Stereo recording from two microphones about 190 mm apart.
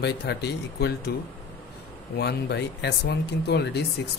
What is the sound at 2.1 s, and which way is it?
Speech, 60° left (ahead or behind).